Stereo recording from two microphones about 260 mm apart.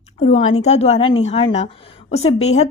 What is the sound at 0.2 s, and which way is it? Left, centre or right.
A woman's voice, left.